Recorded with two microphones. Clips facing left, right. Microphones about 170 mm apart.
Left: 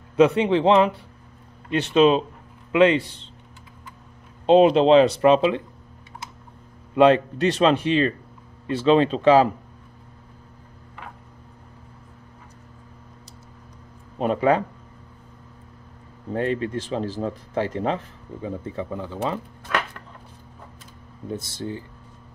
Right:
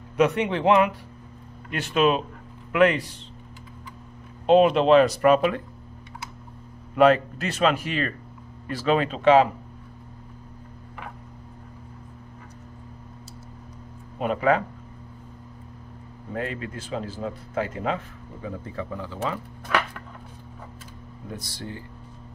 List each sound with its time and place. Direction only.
0.1 s speech: 30° left (ahead or behind)
4.5 s speech: 30° left (ahead or behind)
7.0 s speech: 30° left (ahead or behind)
14.1 s speech: 30° left (ahead or behind)
16.3 s speech: 30° left (ahead or behind)
21.3 s speech: 25° left (ahead or behind)